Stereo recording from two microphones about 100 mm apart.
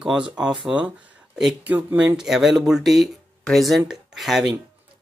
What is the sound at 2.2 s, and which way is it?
Speech, 5° right (ahead or behind).